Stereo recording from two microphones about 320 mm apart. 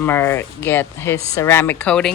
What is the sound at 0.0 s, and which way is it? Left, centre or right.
Speech, centre.